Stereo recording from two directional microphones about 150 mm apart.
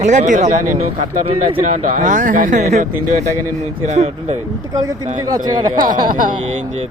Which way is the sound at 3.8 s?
50° right (ahead or behind).